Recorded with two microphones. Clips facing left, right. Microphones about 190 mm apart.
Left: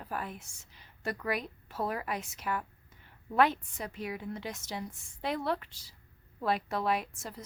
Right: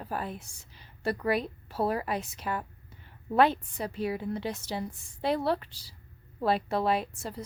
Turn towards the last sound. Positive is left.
turn(degrees=-30)  # may be behind; listen again after turning